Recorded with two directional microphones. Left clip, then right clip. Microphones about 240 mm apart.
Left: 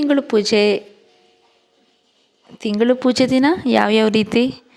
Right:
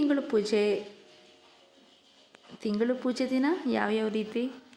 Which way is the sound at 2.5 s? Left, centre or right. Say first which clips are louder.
Left 12 dB; left.